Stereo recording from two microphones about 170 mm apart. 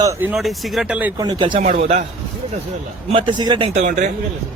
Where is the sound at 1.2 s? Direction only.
25° right (ahead or behind).